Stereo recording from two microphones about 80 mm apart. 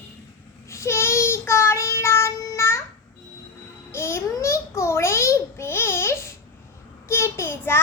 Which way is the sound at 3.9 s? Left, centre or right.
Left.